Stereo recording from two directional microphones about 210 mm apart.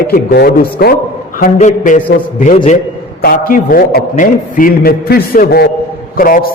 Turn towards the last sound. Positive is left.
turn(degrees=45)  # may be behind; listen again after turning